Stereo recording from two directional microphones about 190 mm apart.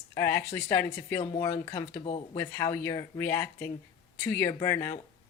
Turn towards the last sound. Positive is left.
turn(degrees=15)  # may be behind; listen again after turning